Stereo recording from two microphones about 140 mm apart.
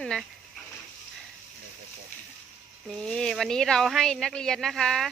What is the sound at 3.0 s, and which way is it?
Speech, 5° left (ahead or behind).